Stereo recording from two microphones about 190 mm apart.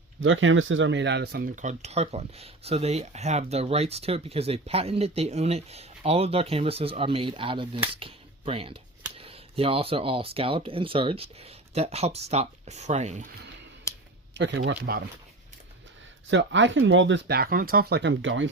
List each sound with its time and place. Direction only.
0.2 s speech: 90° right; by 1.6 s 55° right (ahead or behind)
1.6 s speech: 35° right (ahead or behind)
14.3 s speech: 70° right (ahead or behind)
16.3 s speech: 70° right (ahead or behind)